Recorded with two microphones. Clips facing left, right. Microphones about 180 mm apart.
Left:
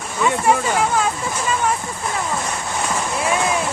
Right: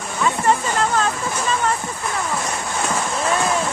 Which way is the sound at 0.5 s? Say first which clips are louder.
Left 1 dB; 10° left (ahead or behind).